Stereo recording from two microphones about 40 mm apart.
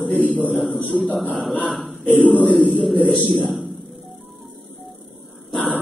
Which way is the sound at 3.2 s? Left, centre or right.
Centre.